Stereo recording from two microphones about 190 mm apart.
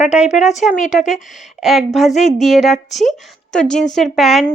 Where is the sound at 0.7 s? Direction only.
40° left (ahead or behind).